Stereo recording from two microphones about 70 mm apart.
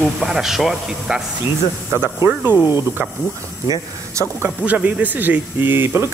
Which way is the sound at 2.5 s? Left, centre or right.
Left.